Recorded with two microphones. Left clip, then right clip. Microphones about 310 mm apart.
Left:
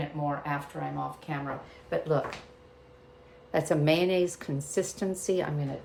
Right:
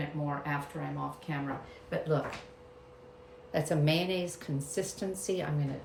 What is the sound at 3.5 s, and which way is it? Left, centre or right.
Speech, left.